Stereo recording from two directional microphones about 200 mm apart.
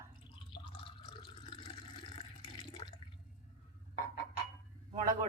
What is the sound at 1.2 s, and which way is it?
Water, 25° left (ahead or behind).